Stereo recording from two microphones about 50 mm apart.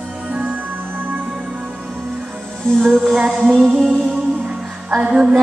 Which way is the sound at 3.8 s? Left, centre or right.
Centre.